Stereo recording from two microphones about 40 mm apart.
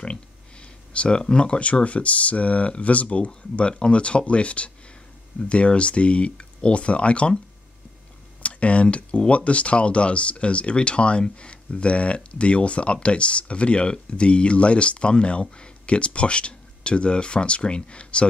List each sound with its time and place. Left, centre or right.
0.0 s speech: left
8.4 s speech: left